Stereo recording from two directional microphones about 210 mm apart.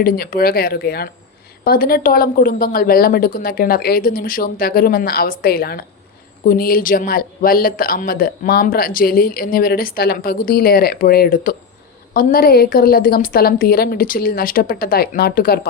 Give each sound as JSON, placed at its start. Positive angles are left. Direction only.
{"t": 0.0, "sound": "speech", "side_deg": 45}